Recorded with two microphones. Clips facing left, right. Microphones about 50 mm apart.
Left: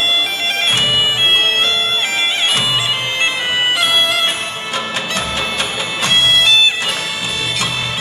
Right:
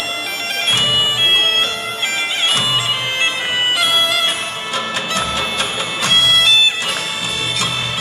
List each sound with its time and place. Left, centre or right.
0.0 s bagpipes: left
1.6 s bagpipes: left
6.0 s music: left